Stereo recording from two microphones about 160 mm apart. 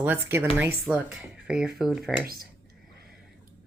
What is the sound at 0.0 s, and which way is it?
Speech, 15° right (ahead or behind).